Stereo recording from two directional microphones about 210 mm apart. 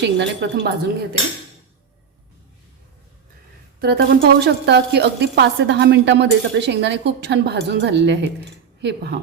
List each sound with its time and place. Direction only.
0.0 s a woman's voice: 55° right (ahead or behind)
3.8 s a woman's voice: 45° right (ahead or behind)